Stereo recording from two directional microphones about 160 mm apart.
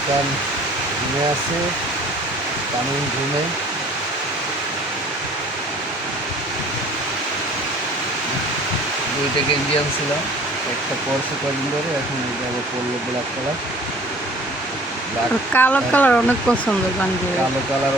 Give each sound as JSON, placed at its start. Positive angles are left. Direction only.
{"t": 15.5, "sound": "speech", "side_deg": 10}